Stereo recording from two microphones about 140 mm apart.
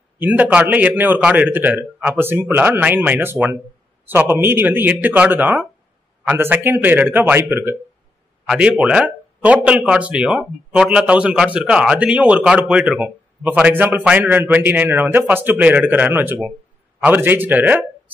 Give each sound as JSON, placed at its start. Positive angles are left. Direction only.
{"t": 0.2, "sound": "speech", "side_deg": -10}